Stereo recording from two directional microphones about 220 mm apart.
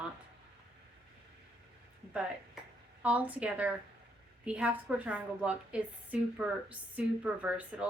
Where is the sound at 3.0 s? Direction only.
5° right (ahead or behind).